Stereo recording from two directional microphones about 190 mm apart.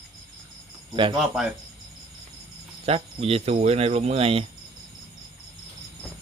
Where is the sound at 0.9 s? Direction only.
25° right (ahead or behind).